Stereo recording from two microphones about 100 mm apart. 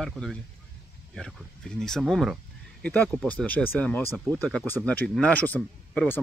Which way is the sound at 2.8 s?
15° left (ahead or behind).